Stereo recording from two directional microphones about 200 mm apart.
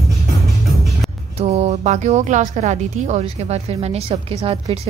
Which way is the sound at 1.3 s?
35° right (ahead or behind).